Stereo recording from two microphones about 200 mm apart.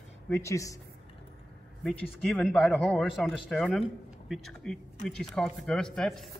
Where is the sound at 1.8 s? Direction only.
Centre (ahead or behind).